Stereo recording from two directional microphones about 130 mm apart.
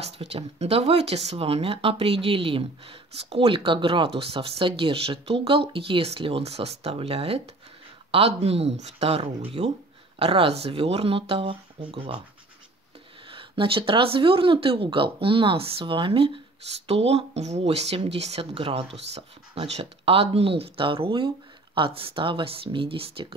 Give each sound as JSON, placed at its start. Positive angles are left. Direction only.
{"t": 0.0, "sound": "speech", "side_deg": -50}
{"t": 10.1, "sound": "speech", "side_deg": -45}
{"t": 13.3, "sound": "speech", "side_deg": -40}